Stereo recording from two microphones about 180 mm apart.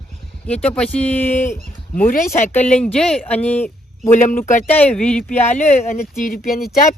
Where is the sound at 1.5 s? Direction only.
50° left (ahead or behind).